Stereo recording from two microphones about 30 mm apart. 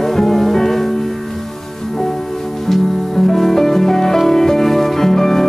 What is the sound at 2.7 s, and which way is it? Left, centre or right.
Music, centre.